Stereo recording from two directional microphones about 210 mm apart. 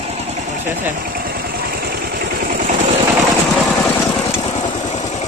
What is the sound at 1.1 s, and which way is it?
Vehicle, 45° right (ahead or behind).